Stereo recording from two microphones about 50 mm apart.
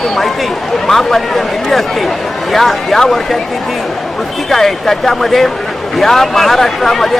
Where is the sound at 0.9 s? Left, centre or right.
Centre.